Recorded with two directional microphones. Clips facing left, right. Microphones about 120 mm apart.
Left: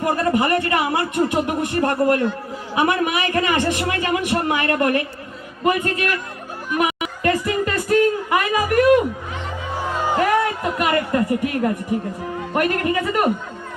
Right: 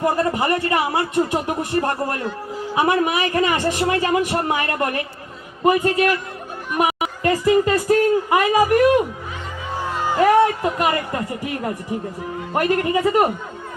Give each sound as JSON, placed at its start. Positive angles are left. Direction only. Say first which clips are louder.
{"t": 0.0, "sound": "a man's voice", "louder": "even", "side_deg": -30}
{"t": 6.7, "sound": "a sound", "louder": "right 1 dB", "side_deg": -30}
{"t": 10.2, "sound": "a man's voice", "louder": "right 6 dB", "side_deg": -25}